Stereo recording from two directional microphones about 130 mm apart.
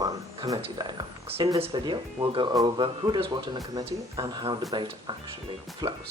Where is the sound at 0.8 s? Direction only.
30° right (ahead or behind).